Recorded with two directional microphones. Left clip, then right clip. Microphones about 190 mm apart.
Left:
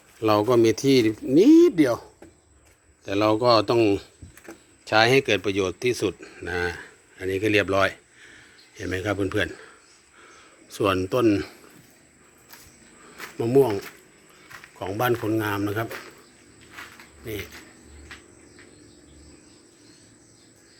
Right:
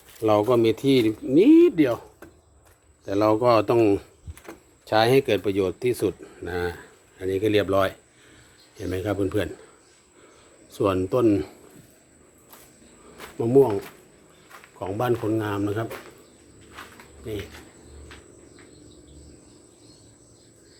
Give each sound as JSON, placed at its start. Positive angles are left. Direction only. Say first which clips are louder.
{"t": 0.2, "sound": "speech", "louder": "even", "side_deg": 15}
{"t": 3.1, "sound": "speech", "louder": "even", "side_deg": 0}
{"t": 10.7, "sound": "speech", "louder": "even", "side_deg": 0}
{"t": 13.1, "sound": "speech", "louder": "right 1 dB", "side_deg": 5}